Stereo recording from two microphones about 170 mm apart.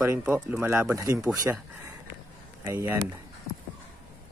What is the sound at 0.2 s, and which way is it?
Speech, 10° right (ahead or behind).